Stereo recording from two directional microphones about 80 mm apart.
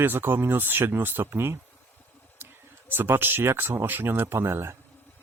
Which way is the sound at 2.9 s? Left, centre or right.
Right.